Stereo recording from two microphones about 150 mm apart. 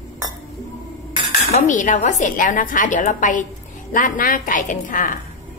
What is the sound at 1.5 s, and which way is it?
A woman's voice, 55° left (ahead or behind).